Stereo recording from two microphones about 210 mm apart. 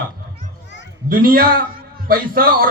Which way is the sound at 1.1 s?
45° right (ahead or behind).